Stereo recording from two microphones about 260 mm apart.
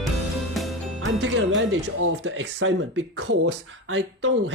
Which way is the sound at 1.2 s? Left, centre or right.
Right.